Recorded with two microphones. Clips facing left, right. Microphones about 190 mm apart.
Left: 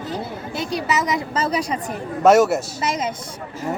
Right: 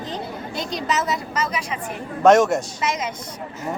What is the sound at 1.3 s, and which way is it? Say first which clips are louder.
Speech: left 4 dB; 35° left (ahead or behind).